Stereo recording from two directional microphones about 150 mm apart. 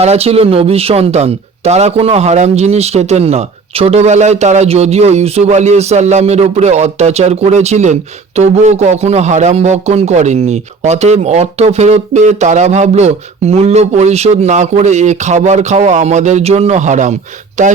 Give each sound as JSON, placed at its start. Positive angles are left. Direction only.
{"t": 0.0, "sound": "speech", "side_deg": -45}